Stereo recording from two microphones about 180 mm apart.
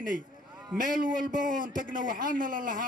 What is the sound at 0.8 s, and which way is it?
A man's voice, 50° right (ahead or behind).